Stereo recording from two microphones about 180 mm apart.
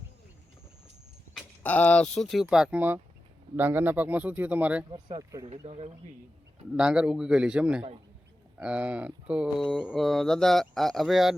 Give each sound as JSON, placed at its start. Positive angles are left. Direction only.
{"t": 1.3, "sound": "speech", "side_deg": 5}
{"t": 4.9, "sound": "speech", "side_deg": -25}
{"t": 5.5, "sound": "speech", "side_deg": -35}
{"t": 6.7, "sound": "speech", "side_deg": -5}